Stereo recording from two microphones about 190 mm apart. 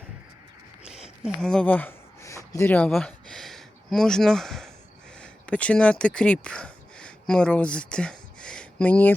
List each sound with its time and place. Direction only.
1.2 s speech: 5° left (ahead or behind)